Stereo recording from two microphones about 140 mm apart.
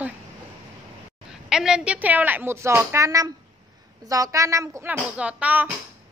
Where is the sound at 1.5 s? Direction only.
5° right (ahead or behind).